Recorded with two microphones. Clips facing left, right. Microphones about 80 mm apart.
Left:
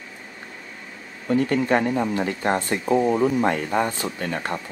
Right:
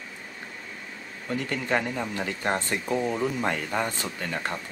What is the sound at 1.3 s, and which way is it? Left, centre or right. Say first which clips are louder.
Speech: left 7 dB; left.